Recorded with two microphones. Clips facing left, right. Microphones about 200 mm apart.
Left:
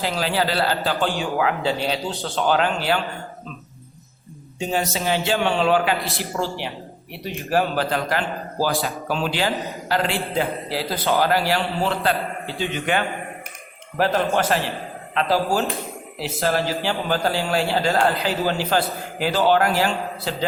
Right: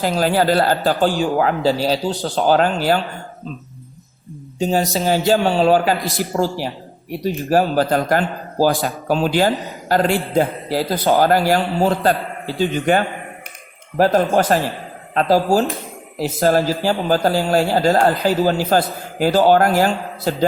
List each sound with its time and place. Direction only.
0.0 s a man's voice: 45° right (ahead or behind)
4.6 s speech: 35° right (ahead or behind)
7.5 s a man's voice: 40° right (ahead or behind)